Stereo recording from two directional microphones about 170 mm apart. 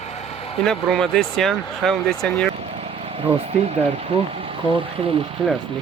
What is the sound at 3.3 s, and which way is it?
Speech, 35° right (ahead or behind).